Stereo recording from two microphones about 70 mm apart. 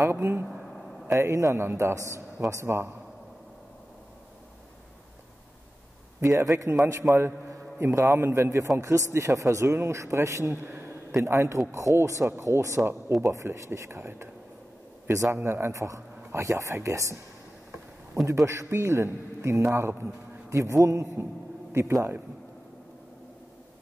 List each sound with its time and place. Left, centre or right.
0.0 s speech: right
6.2 s a man's voice: right
10.5 s a sound: right
11.2 s a man's voice: right
18.2 s a man's voice: right